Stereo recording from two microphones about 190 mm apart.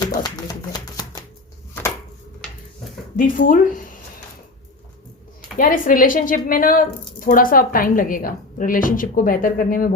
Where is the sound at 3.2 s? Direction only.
45° left (ahead or behind).